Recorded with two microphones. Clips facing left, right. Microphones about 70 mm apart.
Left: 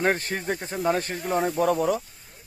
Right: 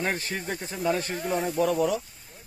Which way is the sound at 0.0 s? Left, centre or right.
Left.